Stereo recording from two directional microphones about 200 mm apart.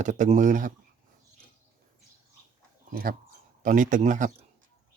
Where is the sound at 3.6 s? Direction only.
40° right (ahead or behind).